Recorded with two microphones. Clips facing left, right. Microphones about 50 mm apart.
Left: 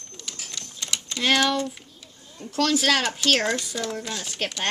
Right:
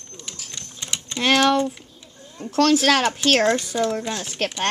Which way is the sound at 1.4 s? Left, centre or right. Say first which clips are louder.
Right 5 dB; right.